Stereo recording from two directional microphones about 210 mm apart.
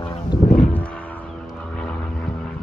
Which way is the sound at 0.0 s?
25° left (ahead or behind).